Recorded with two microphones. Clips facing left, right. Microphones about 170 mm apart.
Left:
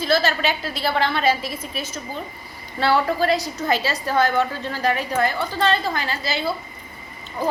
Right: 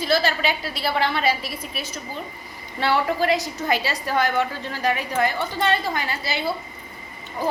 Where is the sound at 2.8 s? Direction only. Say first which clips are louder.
Left 2 dB; 15° right (ahead or behind).